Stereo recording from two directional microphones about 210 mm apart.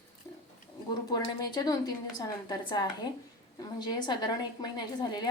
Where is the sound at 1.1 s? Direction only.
20° left (ahead or behind).